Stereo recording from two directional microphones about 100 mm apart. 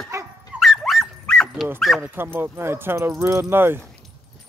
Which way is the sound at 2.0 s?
20° right (ahead or behind).